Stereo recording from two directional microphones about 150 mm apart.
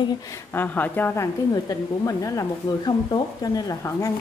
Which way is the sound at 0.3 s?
15° left (ahead or behind).